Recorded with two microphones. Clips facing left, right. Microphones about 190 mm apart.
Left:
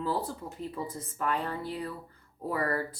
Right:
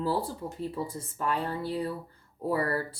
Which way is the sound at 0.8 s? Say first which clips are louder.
Left 2 dB; 30° right (ahead or behind).